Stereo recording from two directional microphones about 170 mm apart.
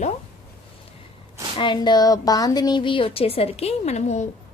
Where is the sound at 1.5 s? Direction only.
30° left (ahead or behind).